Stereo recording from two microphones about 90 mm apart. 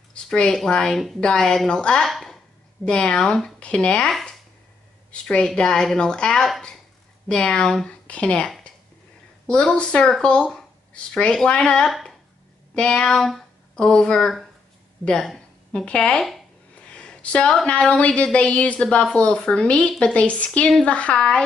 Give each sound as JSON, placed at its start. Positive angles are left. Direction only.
{"t": 0.1, "sound": "a sound", "side_deg": 10}
{"t": 0.6, "sound": "speech", "side_deg": 10}
{"t": 9.5, "sound": "speech", "side_deg": 10}